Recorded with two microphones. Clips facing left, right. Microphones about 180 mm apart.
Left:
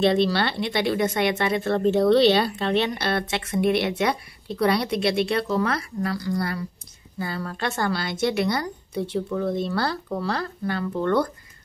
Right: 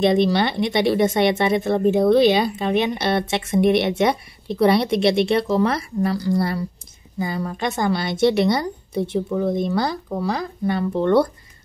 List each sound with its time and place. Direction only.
0.0 s speech: 15° right (ahead or behind)
7.2 s a woman's voice: 15° right (ahead or behind)